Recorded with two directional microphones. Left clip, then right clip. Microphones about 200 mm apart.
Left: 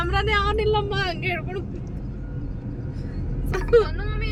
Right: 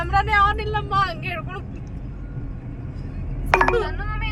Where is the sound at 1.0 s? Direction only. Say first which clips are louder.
Right 2 dB; 55° right (ahead or behind).